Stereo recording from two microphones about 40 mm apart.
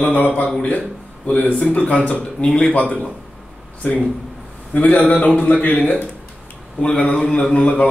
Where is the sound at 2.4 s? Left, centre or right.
Centre.